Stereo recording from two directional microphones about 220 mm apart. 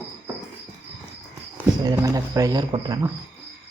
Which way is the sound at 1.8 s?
15° right (ahead or behind).